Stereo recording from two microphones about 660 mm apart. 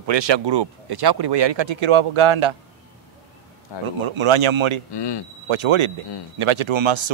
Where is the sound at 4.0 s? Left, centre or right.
Right.